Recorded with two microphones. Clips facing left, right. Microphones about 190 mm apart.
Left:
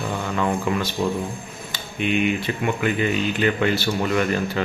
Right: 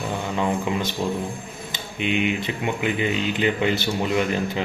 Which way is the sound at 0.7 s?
20° right (ahead or behind).